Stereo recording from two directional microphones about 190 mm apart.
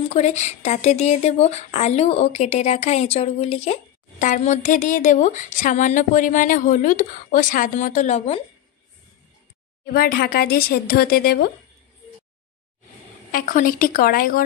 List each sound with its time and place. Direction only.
0.1 s speech: 35° left (ahead or behind)
9.9 s a woman's voice: 55° left (ahead or behind)
13.3 s a woman's voice: 45° left (ahead or behind)